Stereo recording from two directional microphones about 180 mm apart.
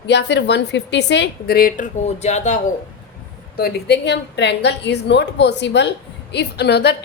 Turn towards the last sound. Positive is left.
turn(degrees=65)  # may be behind; listen again after turning